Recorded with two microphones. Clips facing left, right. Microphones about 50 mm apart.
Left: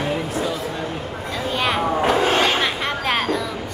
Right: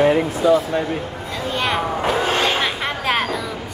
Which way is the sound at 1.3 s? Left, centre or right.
Centre.